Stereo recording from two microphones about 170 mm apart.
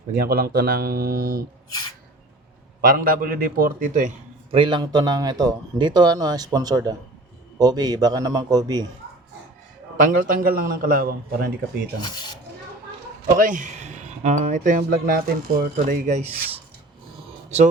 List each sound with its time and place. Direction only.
0.1 s a man's voice: 60° right (ahead or behind)
2.8 s a man's voice: 55° right (ahead or behind)
4.5 s speech: 30° right (ahead or behind)
10.0 s a man's voice: 55° right (ahead or behind)
13.3 s speech: 50° right (ahead or behind)